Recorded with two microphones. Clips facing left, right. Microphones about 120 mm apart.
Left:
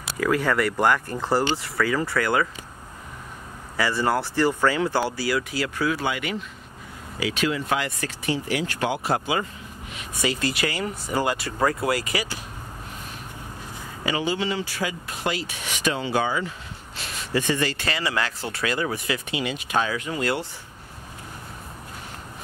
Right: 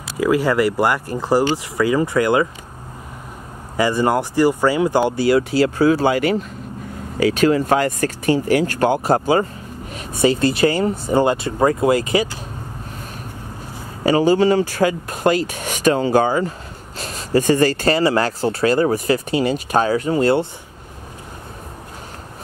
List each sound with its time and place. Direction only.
0.2 s speech: 10° right (ahead or behind)
3.7 s speech: 15° right (ahead or behind); by 11.1 s 35° right (ahead or behind)
11.1 s speech: 25° right (ahead or behind)
14.0 s speech: 40° right (ahead or behind)